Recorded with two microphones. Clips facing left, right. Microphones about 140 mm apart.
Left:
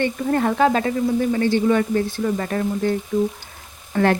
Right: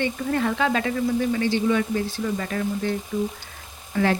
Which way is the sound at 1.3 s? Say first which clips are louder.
Left 4 dB; 50° left (ahead or behind).